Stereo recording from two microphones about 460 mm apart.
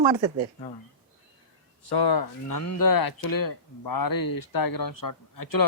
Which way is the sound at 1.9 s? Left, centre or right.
Left.